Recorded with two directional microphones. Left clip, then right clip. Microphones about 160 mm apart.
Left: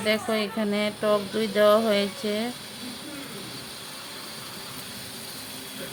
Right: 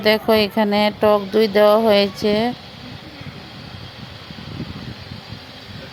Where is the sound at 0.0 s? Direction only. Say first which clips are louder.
Right 10 dB; 45° right (ahead or behind).